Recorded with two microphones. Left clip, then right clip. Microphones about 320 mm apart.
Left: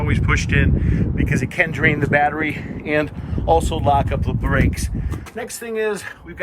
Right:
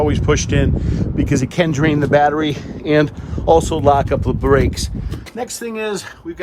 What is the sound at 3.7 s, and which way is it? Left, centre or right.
Speech, right.